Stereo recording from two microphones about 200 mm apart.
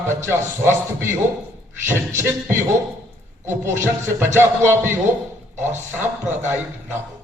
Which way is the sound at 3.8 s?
15° right (ahead or behind).